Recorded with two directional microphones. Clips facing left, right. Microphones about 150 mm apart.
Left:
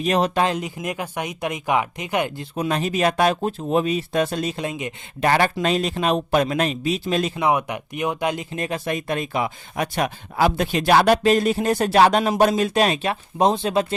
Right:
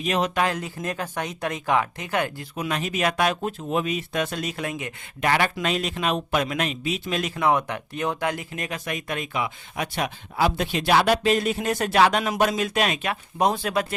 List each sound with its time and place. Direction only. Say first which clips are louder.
0.0 s speech: left 4 dB; 35° left (ahead or behind)
0.4 s speech: left 3 dB; 15° left (ahead or behind)
2.6 s speech: left 5 dB; 35° left (ahead or behind)
5.2 s speech: left 4 dB; 35° left (ahead or behind)
7.3 s speech: left 1 dB; 15° left (ahead or behind)